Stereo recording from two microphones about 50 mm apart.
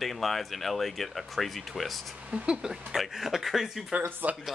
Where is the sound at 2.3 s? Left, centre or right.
Centre.